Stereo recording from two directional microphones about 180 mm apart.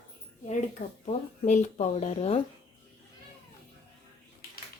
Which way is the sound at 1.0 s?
40° left (ahead or behind).